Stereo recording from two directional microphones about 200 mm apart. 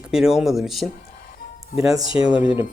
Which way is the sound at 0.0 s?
5° right (ahead or behind).